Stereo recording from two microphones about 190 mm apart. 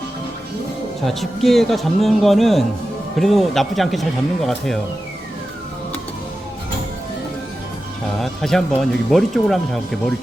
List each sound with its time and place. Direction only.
1.0 s speech: centre (ahead or behind)
8.2 s speech: centre (ahead or behind)